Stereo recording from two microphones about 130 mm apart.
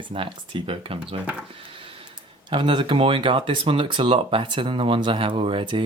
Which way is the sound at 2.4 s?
40° right (ahead or behind).